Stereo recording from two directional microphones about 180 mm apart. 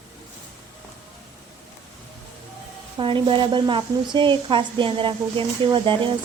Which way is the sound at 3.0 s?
30° right (ahead or behind).